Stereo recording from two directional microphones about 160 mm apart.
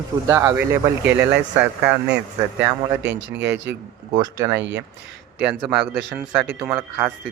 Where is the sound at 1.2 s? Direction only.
90° right.